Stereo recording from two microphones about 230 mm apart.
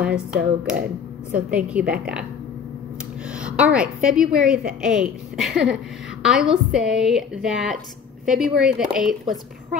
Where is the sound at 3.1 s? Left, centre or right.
Centre.